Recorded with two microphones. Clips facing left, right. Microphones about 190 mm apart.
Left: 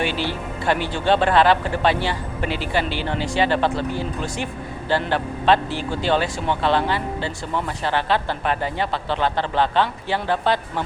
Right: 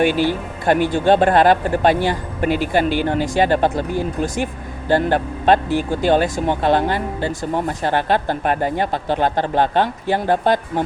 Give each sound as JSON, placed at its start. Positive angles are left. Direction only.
{"t": 0.0, "sound": "speech", "side_deg": -45}